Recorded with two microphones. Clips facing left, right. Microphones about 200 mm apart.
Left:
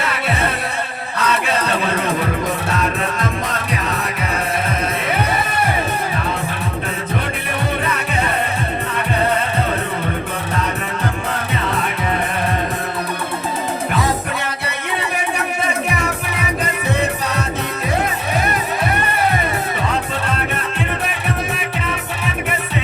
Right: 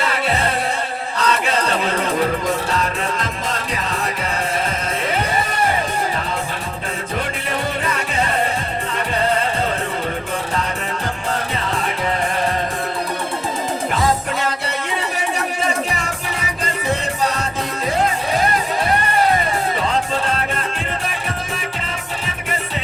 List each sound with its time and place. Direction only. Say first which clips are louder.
0.0 s music: even; 60° left (ahead or behind)
3.2 s music: left 3 dB; 60° left (ahead or behind)